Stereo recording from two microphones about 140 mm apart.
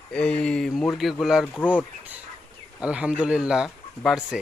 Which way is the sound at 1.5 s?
10° left (ahead or behind).